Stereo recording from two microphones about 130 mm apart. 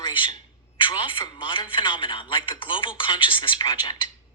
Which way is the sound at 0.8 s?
40° left (ahead or behind).